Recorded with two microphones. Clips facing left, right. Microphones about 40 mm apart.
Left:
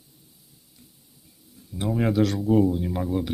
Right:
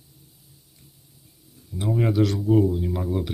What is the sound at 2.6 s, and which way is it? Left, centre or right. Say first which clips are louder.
Speech: even; centre.